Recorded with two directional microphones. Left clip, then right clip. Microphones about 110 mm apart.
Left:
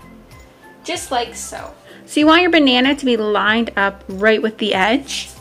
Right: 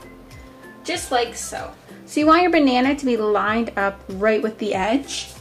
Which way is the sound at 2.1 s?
35° left (ahead or behind).